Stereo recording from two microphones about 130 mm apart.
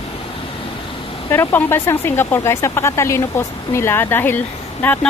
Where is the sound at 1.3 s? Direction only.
15° left (ahead or behind).